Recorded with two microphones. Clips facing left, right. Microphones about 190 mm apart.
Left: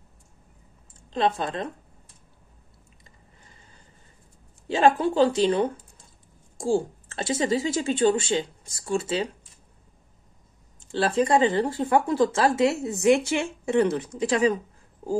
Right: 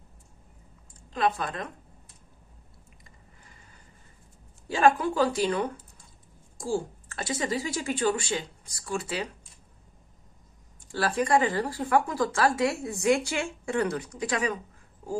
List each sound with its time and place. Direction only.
1.1 s speech: 25° left (ahead or behind)
4.6 s speech: 25° left (ahead or behind)
10.8 s speech: 25° left (ahead or behind)